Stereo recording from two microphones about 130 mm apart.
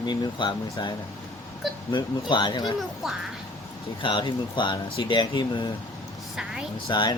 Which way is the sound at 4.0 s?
40° left (ahead or behind).